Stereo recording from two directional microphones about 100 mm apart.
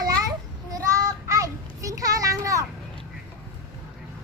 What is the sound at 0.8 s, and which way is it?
Child singing, 35° right (ahead or behind).